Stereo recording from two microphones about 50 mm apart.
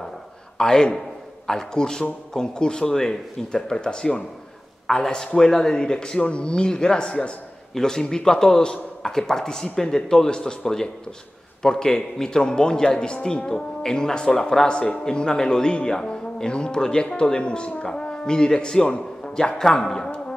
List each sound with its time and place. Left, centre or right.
0.6 s a man's voice: centre